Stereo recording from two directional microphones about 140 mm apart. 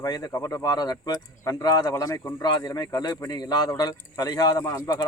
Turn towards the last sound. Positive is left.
turn(degrees=25)  # may be behind; listen again after turning